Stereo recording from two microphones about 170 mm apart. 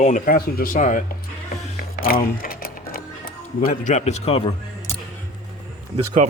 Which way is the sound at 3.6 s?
50° left (ahead or behind).